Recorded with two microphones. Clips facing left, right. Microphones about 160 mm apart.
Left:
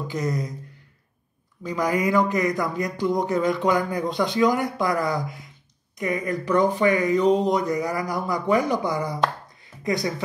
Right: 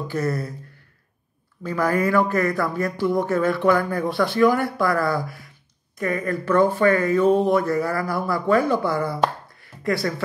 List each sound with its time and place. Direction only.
0.1 s speech: 15° left (ahead or behind)
1.6 s speech: 15° left (ahead or behind)
9.6 s a sound: 20° left (ahead or behind)